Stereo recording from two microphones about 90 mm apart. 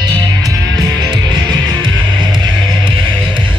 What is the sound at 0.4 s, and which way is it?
Music, 50° right (ahead or behind).